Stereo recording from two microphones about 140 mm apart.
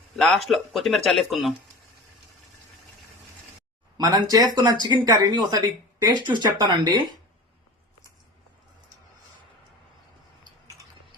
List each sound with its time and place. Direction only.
0.2 s speech: centre (ahead or behind)
3.9 s speech: 30° right (ahead or behind)